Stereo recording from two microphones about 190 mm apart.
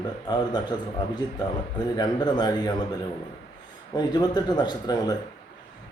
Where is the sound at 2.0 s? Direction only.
20° left (ahead or behind).